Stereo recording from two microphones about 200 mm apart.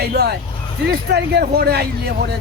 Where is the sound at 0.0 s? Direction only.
55° right (ahead or behind).